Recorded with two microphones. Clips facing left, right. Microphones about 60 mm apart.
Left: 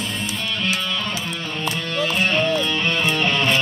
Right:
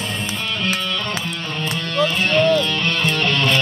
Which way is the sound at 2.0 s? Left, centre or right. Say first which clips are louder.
Right 4 dB; centre.